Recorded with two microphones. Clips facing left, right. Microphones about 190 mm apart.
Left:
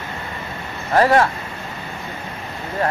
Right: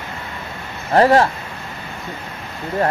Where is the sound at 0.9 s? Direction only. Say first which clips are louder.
Right 2 dB; 30° right (ahead or behind).